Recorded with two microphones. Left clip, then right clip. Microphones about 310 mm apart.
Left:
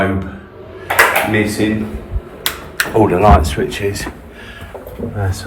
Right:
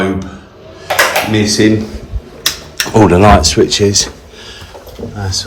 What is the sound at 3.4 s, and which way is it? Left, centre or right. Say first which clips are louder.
Speech: right 9 dB; right.